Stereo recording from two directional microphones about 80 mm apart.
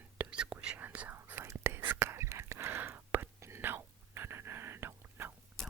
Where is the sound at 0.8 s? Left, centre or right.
Right.